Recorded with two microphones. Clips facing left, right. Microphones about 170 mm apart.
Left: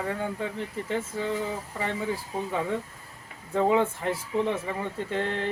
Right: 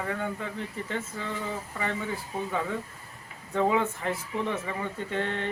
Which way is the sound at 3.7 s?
30° left (ahead or behind).